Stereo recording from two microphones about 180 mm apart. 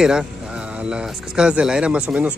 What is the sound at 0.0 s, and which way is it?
Speech, 5° right (ahead or behind).